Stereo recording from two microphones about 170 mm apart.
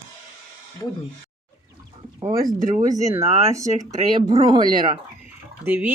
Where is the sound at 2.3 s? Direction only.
55° right (ahead or behind).